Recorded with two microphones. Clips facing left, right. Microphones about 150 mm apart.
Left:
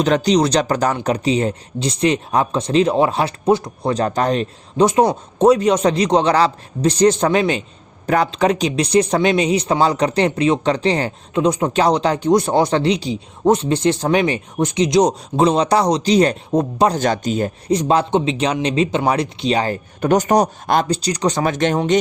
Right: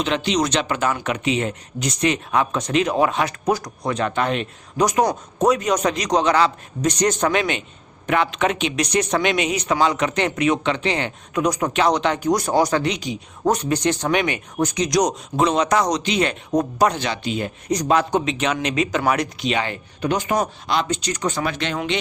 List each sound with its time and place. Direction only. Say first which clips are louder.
0.0 s speech: left 6 dB; 40° left (ahead or behind)
17.0 s speech: left 6 dB; 45° left (ahead or behind)
17.7 s speech: left 2 dB; 30° left (ahead or behind); by 21.8 s 45° left (ahead or behind)